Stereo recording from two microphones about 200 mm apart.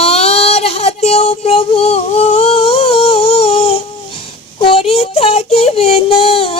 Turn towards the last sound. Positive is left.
turn(degrees=30)  # may be behind; listen again after turning